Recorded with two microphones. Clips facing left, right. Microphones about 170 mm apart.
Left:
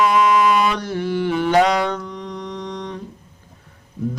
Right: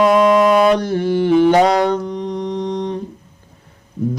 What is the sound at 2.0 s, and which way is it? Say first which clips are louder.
Mantra: right 8 dB; 20° right (ahead or behind).